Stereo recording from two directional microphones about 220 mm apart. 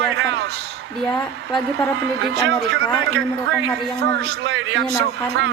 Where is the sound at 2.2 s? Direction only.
55° right (ahead or behind).